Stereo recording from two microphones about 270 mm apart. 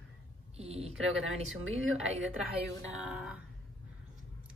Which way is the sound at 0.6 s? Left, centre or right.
Right.